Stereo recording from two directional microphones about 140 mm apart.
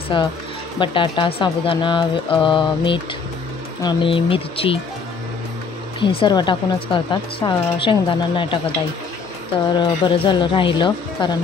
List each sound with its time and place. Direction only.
0.1 s speech: 35° left (ahead or behind)
5.9 s speech: 35° left (ahead or behind)
9.8 s speech: 35° left (ahead or behind)